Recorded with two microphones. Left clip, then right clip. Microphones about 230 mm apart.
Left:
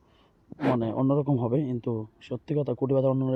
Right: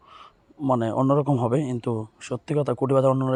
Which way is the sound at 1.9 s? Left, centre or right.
Right.